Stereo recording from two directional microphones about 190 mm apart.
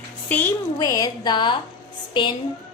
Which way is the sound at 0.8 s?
20° left (ahead or behind).